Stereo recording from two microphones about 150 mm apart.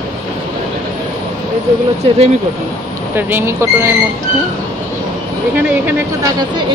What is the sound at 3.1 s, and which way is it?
Speech, 15° right (ahead or behind).